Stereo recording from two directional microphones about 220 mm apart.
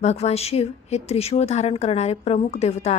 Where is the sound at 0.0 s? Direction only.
30° left (ahead or behind).